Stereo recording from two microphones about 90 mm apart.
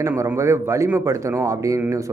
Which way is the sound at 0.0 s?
35° right (ahead or behind).